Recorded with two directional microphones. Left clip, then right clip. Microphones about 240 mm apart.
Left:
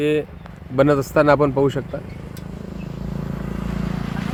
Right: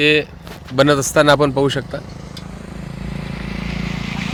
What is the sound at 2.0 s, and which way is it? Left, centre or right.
Vehicle, right.